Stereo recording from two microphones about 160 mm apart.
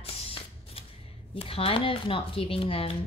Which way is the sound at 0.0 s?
35° left (ahead or behind).